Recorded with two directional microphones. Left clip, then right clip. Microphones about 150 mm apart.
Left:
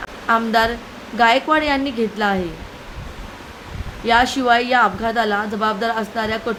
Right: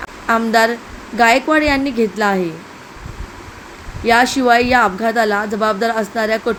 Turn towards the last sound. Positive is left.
turn(degrees=-20)  # may be behind; listen again after turning